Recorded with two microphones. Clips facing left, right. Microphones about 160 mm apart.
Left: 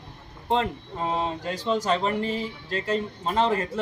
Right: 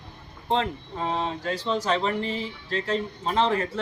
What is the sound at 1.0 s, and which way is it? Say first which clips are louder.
Speech: left 1 dB; 5° left (ahead or behind).